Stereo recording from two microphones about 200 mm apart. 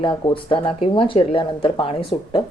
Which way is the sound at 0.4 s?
25° left (ahead or behind).